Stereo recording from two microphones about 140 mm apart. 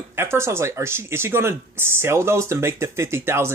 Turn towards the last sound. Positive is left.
turn(degrees=-20)  # may be behind; listen again after turning